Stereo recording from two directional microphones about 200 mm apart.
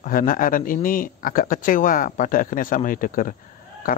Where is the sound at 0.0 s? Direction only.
45° left (ahead or behind).